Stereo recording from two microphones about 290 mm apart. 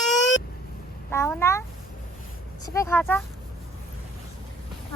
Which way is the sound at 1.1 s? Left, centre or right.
Centre.